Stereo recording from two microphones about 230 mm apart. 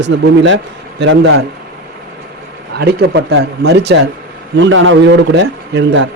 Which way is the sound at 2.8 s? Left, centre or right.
Right.